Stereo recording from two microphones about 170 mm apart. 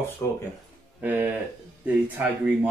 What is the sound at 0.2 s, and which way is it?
Speech, 10° left (ahead or behind).